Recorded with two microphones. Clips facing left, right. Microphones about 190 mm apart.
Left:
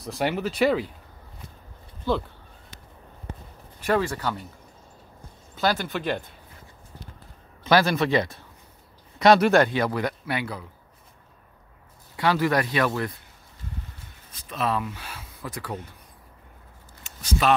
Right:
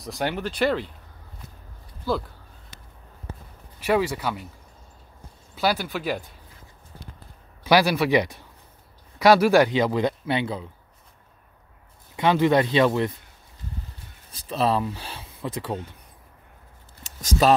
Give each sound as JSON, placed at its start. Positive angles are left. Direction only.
{"t": 0.0, "sound": "speech", "side_deg": 0}
{"t": 2.1, "sound": "speech", "side_deg": -10}
{"t": 3.8, "sound": "speech", "side_deg": -10}
{"t": 5.5, "sound": "speech", "side_deg": -10}
{"t": 7.6, "sound": "speech", "side_deg": -10}
{"t": 12.2, "sound": "speech", "side_deg": -20}
{"t": 14.3, "sound": "speech", "side_deg": -30}
{"t": 17.4, "sound": "speech", "side_deg": -35}